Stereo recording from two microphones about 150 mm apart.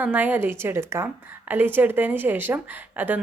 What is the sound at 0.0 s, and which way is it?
A woman's voice, 10° right (ahead or behind).